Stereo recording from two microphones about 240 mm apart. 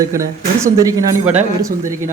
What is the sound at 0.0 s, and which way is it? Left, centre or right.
Speech, centre.